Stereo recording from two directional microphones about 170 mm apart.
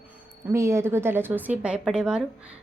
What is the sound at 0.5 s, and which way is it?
A woman's voice, 15° right (ahead or behind).